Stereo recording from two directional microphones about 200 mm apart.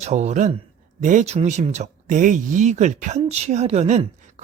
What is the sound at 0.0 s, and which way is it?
Speech, 35° right (ahead or behind).